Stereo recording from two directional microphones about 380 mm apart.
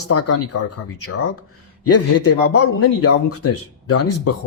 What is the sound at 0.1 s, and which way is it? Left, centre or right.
Speech, left.